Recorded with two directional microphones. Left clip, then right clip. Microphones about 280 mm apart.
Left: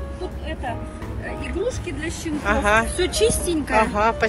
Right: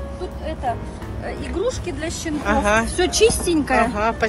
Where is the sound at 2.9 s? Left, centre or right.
Right.